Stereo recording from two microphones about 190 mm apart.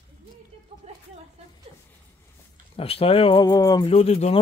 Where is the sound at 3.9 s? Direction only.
30° left (ahead or behind).